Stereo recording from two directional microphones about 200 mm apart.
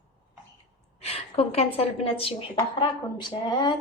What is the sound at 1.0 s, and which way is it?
A woman's voice, 30° left (ahead or behind).